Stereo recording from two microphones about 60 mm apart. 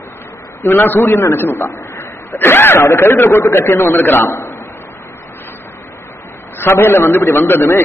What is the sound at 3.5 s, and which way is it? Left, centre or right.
A man's voice, left.